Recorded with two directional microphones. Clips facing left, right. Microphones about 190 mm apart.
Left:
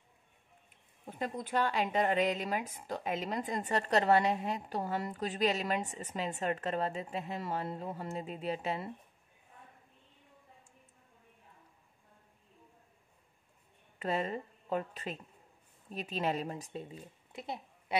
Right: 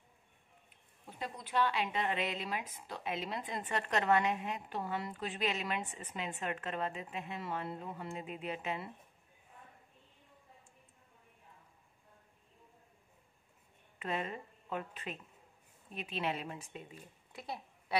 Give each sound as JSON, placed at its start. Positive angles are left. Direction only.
{"t": 1.0, "sound": "a woman's voice", "side_deg": 50}
{"t": 13.9, "sound": "a woman's voice", "side_deg": 35}
{"t": 17.3, "sound": "a sound", "side_deg": 20}